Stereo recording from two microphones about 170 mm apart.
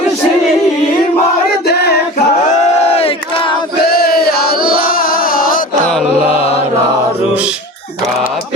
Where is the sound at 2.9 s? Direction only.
35° left (ahead or behind).